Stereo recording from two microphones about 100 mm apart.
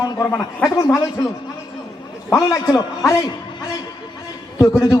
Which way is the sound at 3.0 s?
35° left (ahead or behind).